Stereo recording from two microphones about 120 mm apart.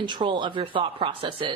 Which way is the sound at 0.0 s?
40° right (ahead or behind).